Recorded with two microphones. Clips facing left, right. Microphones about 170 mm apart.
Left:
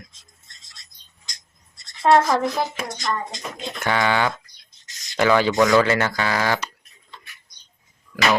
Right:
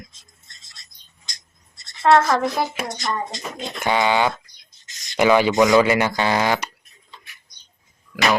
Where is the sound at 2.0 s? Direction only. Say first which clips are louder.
Right 1 dB; 15° left (ahead or behind).